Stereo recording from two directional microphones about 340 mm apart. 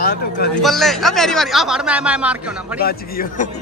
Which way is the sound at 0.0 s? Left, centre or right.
Left.